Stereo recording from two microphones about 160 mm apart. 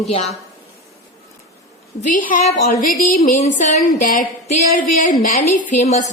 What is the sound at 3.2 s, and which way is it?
A woman's voice, 45° left (ahead or behind).